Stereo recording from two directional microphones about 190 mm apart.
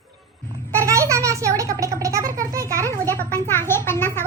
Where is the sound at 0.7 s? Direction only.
15° right (ahead or behind).